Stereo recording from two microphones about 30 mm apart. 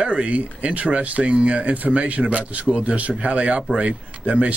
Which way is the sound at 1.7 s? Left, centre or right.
Right.